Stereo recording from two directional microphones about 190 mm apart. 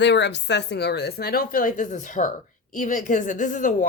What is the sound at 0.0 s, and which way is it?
Speech, 65° left (ahead or behind).